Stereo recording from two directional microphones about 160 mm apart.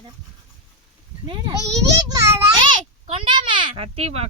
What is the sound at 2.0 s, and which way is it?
A child's voice, 20° right (ahead or behind).